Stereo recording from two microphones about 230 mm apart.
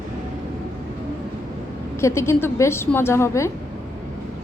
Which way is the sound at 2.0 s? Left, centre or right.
Centre.